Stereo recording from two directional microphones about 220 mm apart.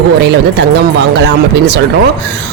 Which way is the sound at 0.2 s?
50° right (ahead or behind).